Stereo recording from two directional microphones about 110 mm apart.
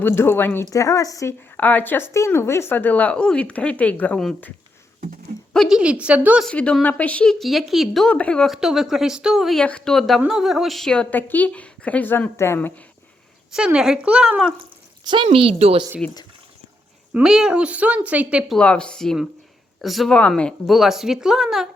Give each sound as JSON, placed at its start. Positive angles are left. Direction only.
{"t": 0.0, "sound": "speech", "side_deg": 20}
{"t": 0.7, "sound": "speech", "side_deg": 30}
{"t": 1.5, "sound": "speech", "side_deg": 15}
{"t": 5.5, "sound": "speech", "side_deg": -5}
{"t": 6.4, "sound": "speech", "side_deg": 10}
{"t": 8.5, "sound": "speech", "side_deg": -5}
{"t": 13.7, "sound": "speech", "side_deg": -5}
{"t": 15.0, "sound": "a woman's voice", "side_deg": -50}
{"t": 16.0, "sound": "speech", "side_deg": 10}
{"t": 17.2, "sound": "speech", "side_deg": -5}
{"t": 18.5, "sound": "speech", "side_deg": 10}